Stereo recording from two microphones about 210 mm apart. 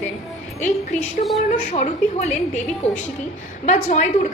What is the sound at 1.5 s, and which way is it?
Speech, 35° left (ahead or behind).